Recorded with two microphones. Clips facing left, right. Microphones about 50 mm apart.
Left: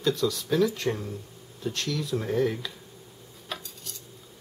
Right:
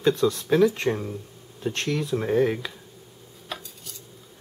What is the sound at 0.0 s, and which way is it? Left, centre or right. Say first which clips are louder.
Speech: right 4 dB; right.